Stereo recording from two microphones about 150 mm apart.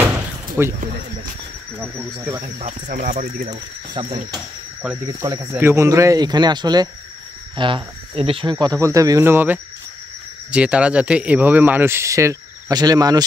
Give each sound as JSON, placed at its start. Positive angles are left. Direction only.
{"t": 0.6, "sound": "speech", "side_deg": -15}
{"t": 2.6, "sound": "speech", "side_deg": -70}
{"t": 3.4, "sound": "speech", "side_deg": -30}